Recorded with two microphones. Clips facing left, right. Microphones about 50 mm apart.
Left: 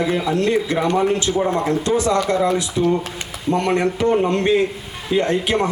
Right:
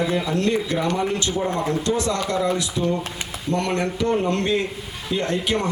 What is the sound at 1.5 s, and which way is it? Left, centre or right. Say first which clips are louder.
Speech: left 4 dB; centre.